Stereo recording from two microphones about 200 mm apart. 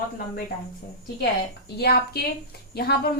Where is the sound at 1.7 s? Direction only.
55° left (ahead or behind).